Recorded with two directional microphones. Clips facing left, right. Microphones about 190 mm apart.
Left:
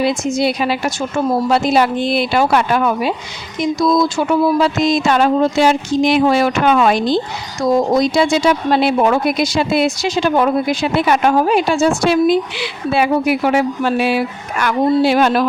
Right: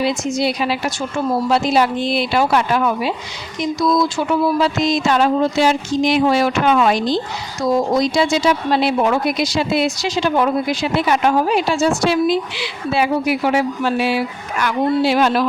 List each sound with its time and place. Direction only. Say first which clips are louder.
0.0 s a woman's voice: left 2 dB; 50° left (ahead or behind)